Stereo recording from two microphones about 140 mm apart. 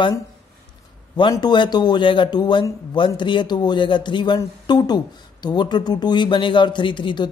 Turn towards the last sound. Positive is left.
turn(degrees=35)  # may be behind; listen again after turning